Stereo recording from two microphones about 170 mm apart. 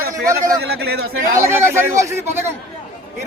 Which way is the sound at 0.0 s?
65° right (ahead or behind).